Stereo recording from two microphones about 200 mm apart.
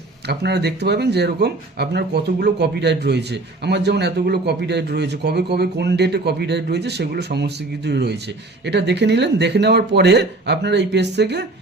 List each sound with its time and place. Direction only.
0.3 s speech: 55° right (ahead or behind)